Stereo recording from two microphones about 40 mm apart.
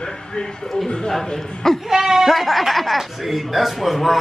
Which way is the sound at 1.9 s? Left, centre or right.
Centre.